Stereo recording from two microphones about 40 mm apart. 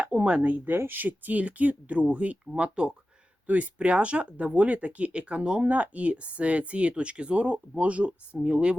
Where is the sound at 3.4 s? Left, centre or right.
Right.